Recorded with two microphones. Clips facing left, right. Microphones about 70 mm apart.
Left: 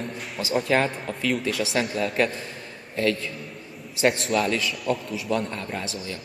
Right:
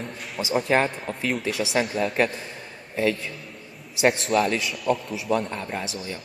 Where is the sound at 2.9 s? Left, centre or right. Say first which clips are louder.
Even; centre.